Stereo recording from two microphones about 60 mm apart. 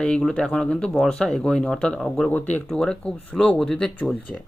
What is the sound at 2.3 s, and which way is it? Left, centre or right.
Speech, left.